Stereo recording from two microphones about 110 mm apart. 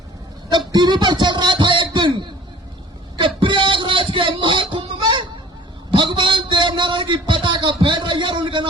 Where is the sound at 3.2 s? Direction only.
50° right (ahead or behind).